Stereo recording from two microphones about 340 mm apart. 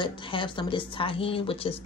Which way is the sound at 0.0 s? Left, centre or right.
Centre.